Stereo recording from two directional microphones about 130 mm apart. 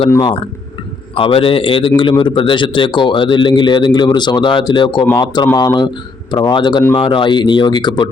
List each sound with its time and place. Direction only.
1.1 s a man's voice: 45° left (ahead or behind)